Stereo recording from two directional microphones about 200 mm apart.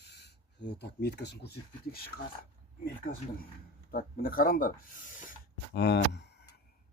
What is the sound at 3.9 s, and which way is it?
Speech, 45° left (ahead or behind).